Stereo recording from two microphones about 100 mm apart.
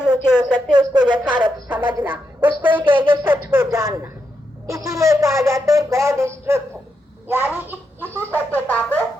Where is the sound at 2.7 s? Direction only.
20° right (ahead or behind).